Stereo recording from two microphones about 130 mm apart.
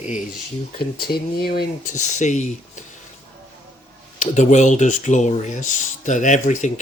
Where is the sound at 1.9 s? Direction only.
65° left (ahead or behind).